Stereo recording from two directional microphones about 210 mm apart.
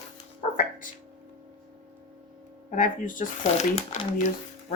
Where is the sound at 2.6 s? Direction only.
40° left (ahead or behind).